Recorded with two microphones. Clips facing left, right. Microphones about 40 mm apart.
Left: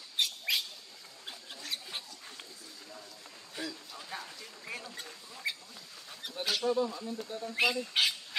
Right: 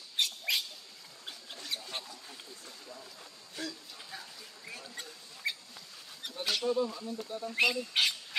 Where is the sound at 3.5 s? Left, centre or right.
Centre.